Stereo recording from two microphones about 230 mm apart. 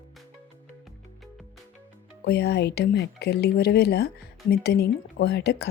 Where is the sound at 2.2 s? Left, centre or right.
Left.